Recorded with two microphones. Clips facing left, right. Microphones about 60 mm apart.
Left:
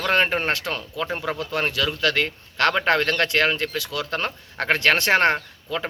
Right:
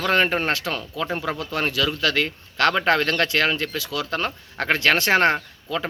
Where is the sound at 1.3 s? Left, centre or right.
Left.